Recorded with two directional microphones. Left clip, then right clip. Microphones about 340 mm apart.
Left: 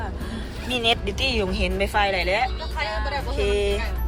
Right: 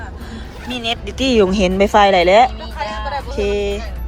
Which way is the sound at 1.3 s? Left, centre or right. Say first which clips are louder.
Right 11 dB; centre.